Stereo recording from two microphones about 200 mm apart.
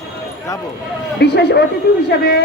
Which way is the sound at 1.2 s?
55° left (ahead or behind).